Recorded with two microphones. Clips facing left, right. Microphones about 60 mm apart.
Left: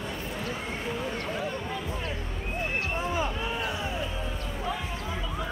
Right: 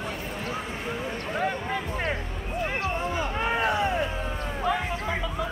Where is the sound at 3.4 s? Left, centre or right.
Right.